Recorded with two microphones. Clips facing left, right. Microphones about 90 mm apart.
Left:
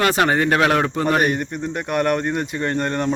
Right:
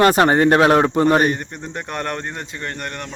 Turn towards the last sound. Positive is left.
turn(degrees=25)  # may be behind; listen again after turning